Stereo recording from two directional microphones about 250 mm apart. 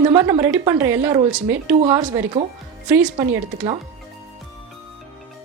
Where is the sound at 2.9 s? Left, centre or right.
Centre.